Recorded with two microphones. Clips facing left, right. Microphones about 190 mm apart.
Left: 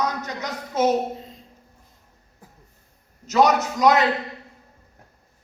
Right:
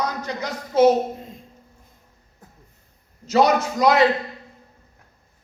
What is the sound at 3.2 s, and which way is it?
Speech, 30° right (ahead or behind).